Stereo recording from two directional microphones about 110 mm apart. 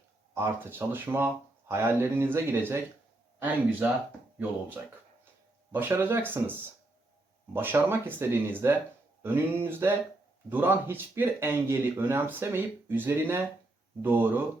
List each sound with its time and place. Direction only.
0.3 s speech: 20° right (ahead or behind)
5.7 s speech: 20° right (ahead or behind)